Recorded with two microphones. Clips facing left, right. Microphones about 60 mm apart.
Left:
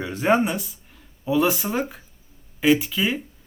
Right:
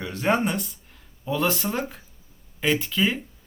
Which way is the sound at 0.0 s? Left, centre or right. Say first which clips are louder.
Left 3 dB; centre.